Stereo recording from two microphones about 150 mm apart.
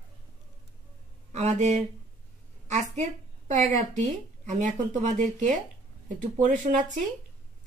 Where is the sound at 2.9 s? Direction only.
50° right (ahead or behind).